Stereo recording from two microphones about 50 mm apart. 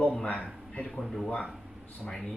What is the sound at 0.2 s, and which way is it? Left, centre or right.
Speech, left.